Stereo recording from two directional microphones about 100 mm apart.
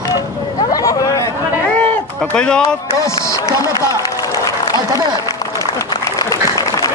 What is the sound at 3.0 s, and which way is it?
Speech, 30° left (ahead or behind).